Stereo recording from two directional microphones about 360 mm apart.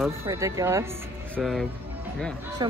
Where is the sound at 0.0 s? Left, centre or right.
Centre.